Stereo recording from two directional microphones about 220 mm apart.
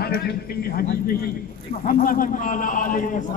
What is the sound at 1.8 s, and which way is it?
Speech, 40° left (ahead or behind).